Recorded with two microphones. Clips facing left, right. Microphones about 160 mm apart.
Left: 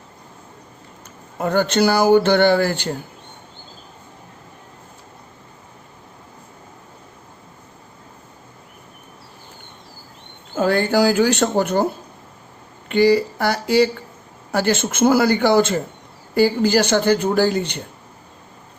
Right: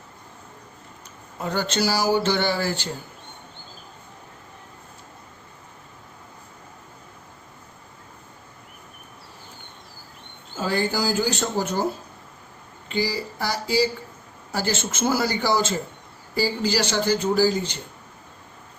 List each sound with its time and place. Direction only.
1.4 s speech: 55° left (ahead or behind)
10.5 s speech: 60° left (ahead or behind)
12.9 s speech: 60° left (ahead or behind)